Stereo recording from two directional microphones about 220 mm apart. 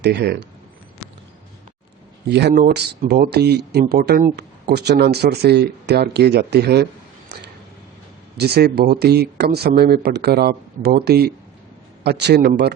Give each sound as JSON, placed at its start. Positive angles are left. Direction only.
{"t": 0.0, "sound": "speech", "side_deg": -50}
{"t": 2.3, "sound": "speech", "side_deg": -45}
{"t": 8.4, "sound": "speech", "side_deg": -45}